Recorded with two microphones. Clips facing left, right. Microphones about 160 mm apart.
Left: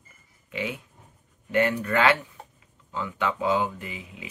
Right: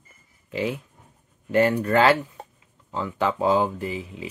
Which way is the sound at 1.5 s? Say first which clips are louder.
Right 4 dB; 35° right (ahead or behind).